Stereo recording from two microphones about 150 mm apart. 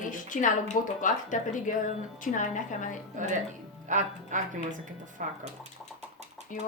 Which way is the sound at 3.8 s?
55° right (ahead or behind).